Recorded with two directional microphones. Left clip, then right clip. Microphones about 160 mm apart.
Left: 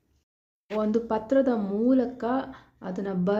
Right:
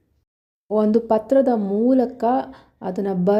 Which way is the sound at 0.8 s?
30° right (ahead or behind).